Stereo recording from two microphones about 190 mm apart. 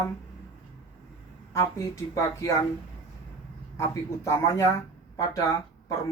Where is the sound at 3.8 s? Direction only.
15° left (ahead or behind).